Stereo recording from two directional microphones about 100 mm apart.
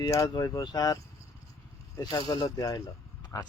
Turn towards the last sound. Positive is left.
turn(degrees=30)  # may be behind; listen again after turning